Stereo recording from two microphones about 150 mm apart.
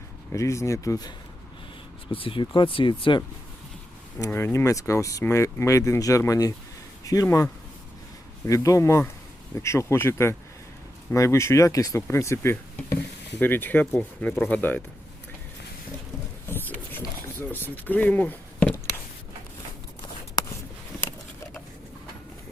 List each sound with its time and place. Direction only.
0.3 s speech: 20° left (ahead or behind)
2.0 s speech: 35° left (ahead or behind)
4.2 s a man's voice: 15° left (ahead or behind)
8.4 s speech: 20° left (ahead or behind)
16.5 s a sound: 15° left (ahead or behind)